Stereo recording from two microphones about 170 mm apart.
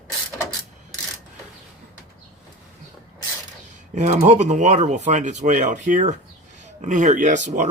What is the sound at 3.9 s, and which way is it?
Speech, 45° right (ahead or behind).